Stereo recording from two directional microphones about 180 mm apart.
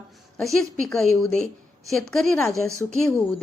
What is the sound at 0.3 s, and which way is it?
A woman's voice, centre (ahead or behind).